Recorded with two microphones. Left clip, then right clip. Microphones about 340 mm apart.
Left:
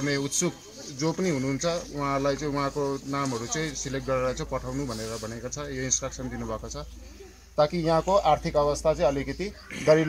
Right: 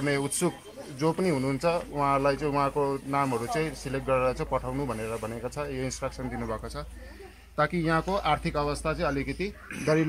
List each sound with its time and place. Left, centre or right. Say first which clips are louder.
0.0 s speech: even; centre
7.5 s speech: left 3 dB; centre